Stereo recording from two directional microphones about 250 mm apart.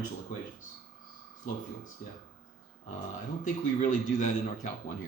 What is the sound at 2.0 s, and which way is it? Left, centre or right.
Speech, left.